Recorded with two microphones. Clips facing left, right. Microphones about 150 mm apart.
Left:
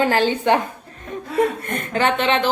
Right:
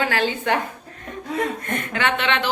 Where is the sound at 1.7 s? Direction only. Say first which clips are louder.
Left 3 dB; 35° left (ahead or behind).